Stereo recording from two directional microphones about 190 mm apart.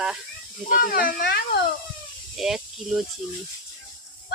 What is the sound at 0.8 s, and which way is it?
Speech, 50° left (ahead or behind).